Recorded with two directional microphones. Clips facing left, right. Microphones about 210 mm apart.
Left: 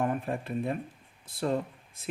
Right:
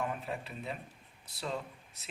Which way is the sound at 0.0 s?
50° left (ahead or behind).